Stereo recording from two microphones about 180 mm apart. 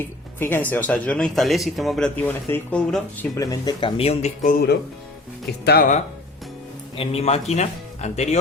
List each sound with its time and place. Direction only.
0.3 s speech: 10° left (ahead or behind)
3.3 s speech: 20° left (ahead or behind); by 4.3 s 35° left (ahead or behind)
4.4 s speech: 60° left (ahead or behind)
6.9 s speech: 30° left (ahead or behind)